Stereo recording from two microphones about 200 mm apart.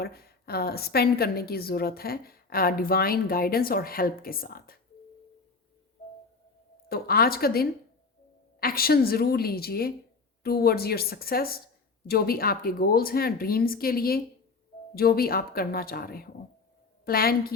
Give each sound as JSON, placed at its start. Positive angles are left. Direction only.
{"t": 0.0, "sound": "a woman's voice", "side_deg": 50}
{"t": 6.8, "sound": "a woman's voice", "side_deg": 50}